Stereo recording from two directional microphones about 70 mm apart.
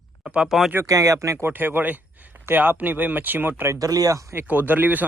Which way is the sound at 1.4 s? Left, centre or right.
Right.